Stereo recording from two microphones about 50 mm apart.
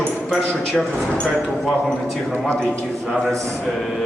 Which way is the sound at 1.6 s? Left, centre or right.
Centre.